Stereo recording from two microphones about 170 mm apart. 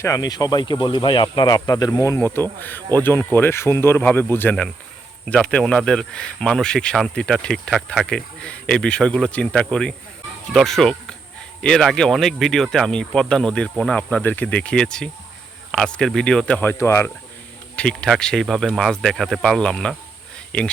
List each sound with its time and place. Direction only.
0.0 s speech: 20° left (ahead or behind)
17.7 s speech: 5° left (ahead or behind)